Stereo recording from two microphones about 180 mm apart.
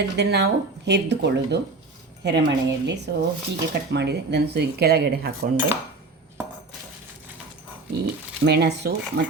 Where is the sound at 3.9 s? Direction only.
70° right (ahead or behind).